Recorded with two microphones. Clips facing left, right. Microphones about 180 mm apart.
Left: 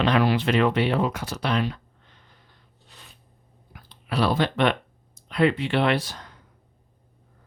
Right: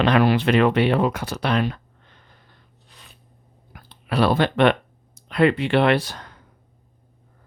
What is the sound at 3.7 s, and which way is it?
Speech, 60° right (ahead or behind).